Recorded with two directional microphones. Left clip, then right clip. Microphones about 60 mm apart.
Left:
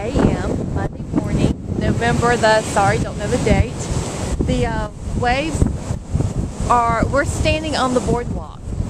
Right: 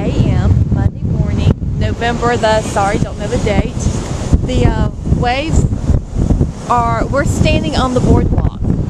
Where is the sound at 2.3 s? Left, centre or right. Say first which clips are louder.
Right 2 dB; right.